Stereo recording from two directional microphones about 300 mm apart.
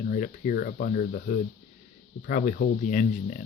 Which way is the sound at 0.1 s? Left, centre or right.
Left.